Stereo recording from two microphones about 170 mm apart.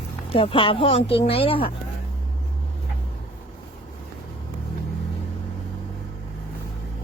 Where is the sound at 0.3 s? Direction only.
35° left (ahead or behind).